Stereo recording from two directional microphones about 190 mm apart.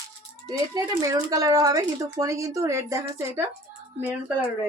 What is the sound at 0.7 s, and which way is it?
Speech, 20° right (ahead or behind).